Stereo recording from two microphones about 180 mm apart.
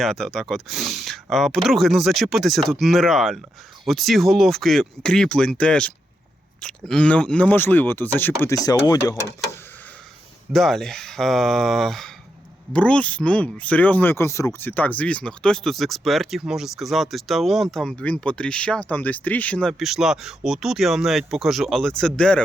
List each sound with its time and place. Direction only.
0.0 s speech: centre (ahead or behind); by 9.1 s 20° left (ahead or behind)
10.5 s speech: centre (ahead or behind)